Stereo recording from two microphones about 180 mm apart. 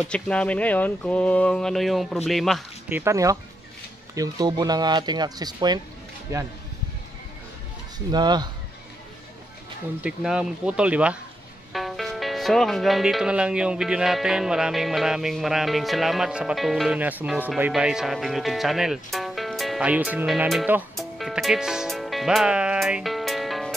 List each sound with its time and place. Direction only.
0.1 s speech: 5° left (ahead or behind)
2.9 s speech: 15° right (ahead or behind)
8.1 s speech: 25° right (ahead or behind)
10.0 s speech: 5° right (ahead or behind)
21.0 s music: centre (ahead or behind)